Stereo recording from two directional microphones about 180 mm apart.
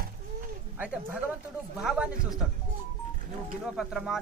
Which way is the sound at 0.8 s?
10° right (ahead or behind).